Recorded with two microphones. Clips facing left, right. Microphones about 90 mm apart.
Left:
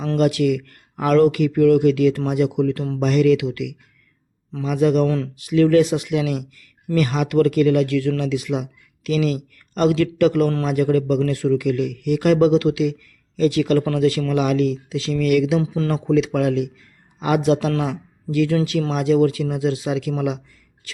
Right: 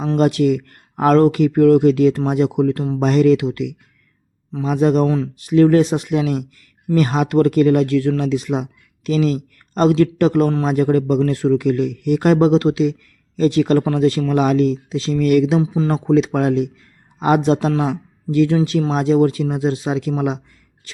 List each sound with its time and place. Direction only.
0.2 s speech: 35° right (ahead or behind)
5.0 s speech: 20° right (ahead or behind)
5.4 s speech: 35° right (ahead or behind)
11.0 s speech: 25° right (ahead or behind)
11.3 s speech: 35° right (ahead or behind)
17.7 s speech: 20° right (ahead or behind)
18.3 s speech: 30° right (ahead or behind)